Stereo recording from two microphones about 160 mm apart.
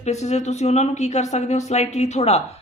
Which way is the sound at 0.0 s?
45° left (ahead or behind).